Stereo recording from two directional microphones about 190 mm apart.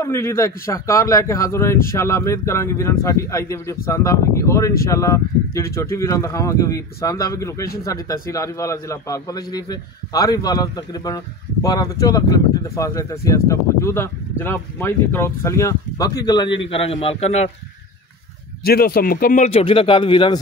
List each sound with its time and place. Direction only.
0.0 s speech: 15° left (ahead or behind); by 17.5 s 35° left (ahead or behind)
18.7 s a man's voice: 50° left (ahead or behind); by 20.3 s 25° left (ahead or behind)